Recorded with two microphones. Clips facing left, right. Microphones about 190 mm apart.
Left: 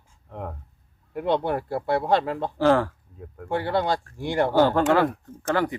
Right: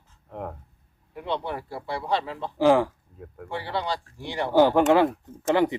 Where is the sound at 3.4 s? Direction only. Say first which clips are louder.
Left 6 dB; 50° left (ahead or behind).